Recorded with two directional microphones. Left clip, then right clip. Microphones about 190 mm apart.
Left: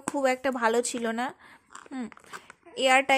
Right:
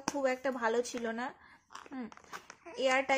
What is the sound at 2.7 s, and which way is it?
Speech, 45° left (ahead or behind).